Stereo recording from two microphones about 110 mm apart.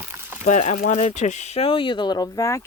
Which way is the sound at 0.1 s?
20° right (ahead or behind).